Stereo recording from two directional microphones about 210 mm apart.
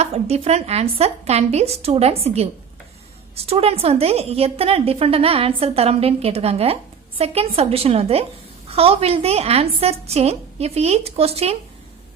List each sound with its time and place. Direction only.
0.0 s a woman's voice: 30° right (ahead or behind)